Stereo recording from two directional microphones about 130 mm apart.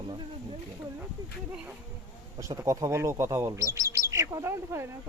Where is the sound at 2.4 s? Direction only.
25° right (ahead or behind).